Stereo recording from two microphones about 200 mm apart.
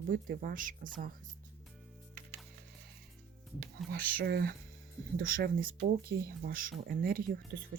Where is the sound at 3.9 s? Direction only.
55° right (ahead or behind).